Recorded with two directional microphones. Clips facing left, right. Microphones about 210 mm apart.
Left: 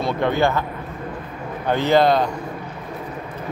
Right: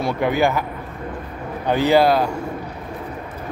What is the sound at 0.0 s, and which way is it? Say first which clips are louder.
Speech: right 1 dB; 10° right (ahead or behind).